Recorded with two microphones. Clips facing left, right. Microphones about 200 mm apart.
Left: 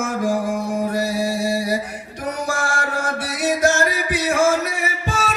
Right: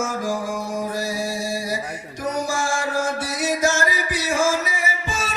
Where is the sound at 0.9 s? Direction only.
60° left (ahead or behind).